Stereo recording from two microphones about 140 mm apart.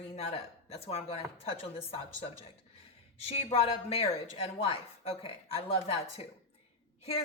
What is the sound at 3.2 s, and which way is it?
Speech, 45° left (ahead or behind).